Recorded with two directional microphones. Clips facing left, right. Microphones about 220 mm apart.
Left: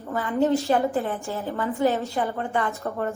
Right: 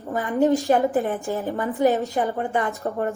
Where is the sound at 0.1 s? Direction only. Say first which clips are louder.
Right 2 dB; 15° right (ahead or behind).